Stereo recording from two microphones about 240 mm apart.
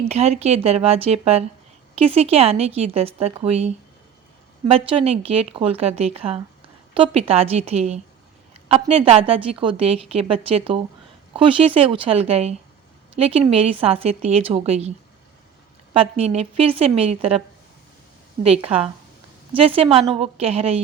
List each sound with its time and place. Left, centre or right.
0.1 s a woman's voice: right
4.7 s a woman's voice: right
18.4 s a woman's voice: right